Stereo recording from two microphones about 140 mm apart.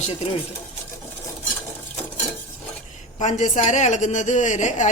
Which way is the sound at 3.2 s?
60° left (ahead or behind).